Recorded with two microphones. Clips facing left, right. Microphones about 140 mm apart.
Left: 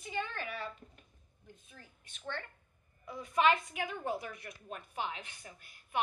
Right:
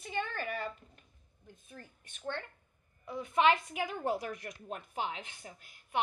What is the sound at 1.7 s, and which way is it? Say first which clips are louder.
Speech: right 6 dB; 50° right (ahead or behind).